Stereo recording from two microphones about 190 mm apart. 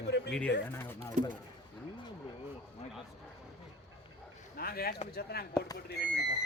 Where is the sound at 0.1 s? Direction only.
65° left (ahead or behind).